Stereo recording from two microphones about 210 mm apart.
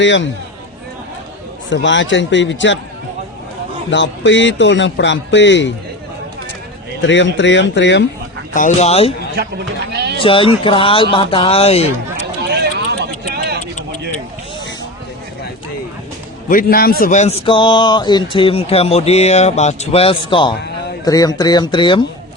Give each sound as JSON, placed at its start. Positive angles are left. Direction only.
{"t": 0.0, "sound": "a man's voice", "side_deg": 60}
{"t": 1.7, "sound": "a man's voice", "side_deg": 60}
{"t": 3.8, "sound": "a man's voice", "side_deg": 60}
{"t": 7.0, "sound": "a man's voice", "side_deg": 60}
{"t": 8.5, "sound": "speech", "side_deg": 35}
{"t": 9.9, "sound": "a sound", "side_deg": -50}
{"t": 10.2, "sound": "speech", "side_deg": 25}
{"t": 12.5, "sound": "a sound", "side_deg": -50}
{"t": 16.5, "sound": "a man's voice", "side_deg": 45}